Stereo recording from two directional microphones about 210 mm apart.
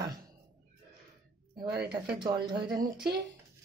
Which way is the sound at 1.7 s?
50° right (ahead or behind).